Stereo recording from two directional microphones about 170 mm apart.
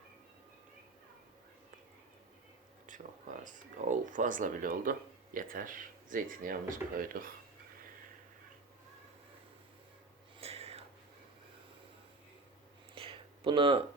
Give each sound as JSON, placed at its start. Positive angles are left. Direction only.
{"t": 2.8, "sound": "speech", "side_deg": -50}
{"t": 10.4, "sound": "whispering", "side_deg": -35}
{"t": 12.9, "sound": "a sound", "side_deg": -35}